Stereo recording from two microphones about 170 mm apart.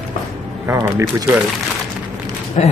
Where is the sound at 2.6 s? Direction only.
40° left (ahead or behind).